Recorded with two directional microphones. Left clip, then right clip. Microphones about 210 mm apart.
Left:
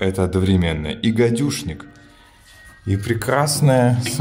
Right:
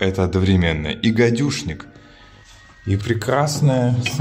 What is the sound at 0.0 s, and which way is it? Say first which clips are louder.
Speech: even; centre (ahead or behind).